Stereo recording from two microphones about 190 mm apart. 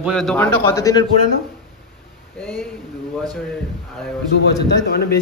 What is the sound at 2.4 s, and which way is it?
Speech, 5° left (ahead or behind).